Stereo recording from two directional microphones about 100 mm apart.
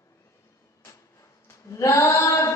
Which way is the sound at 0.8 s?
35° left (ahead or behind).